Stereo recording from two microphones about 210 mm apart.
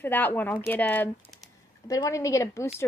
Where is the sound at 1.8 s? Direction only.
15° left (ahead or behind).